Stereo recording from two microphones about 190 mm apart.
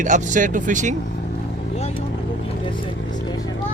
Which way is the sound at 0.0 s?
40° right (ahead or behind).